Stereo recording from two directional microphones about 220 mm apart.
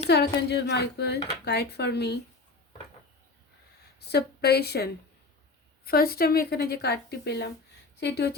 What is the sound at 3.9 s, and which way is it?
A woman's voice, 45° left (ahead or behind).